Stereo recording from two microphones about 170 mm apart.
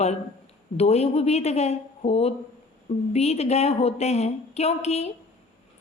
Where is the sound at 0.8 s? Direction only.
35° left (ahead or behind).